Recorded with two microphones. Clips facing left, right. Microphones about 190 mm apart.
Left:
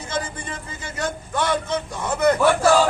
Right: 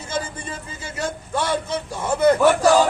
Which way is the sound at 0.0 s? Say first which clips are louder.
Even; 25° right (ahead or behind).